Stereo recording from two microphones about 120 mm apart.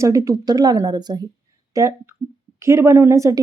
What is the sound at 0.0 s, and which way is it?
Speech, 25° right (ahead or behind).